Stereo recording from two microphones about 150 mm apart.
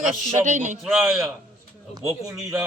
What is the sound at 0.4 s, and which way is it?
Speech, 55° right (ahead or behind).